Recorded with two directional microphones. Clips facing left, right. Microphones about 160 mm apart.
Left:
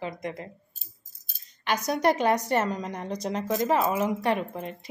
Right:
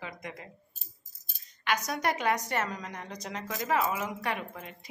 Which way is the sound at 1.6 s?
30° left (ahead or behind).